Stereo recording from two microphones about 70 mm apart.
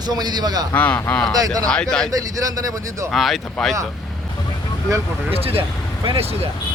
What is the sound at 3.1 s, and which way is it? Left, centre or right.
Speech, centre.